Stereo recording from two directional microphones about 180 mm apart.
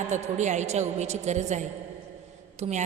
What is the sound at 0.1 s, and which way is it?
A woman's voice, 40° right (ahead or behind).